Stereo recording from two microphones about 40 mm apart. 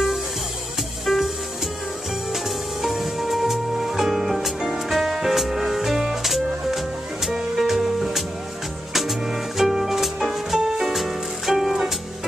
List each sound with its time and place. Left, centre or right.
1.0 s music: centre
2.3 s music: centre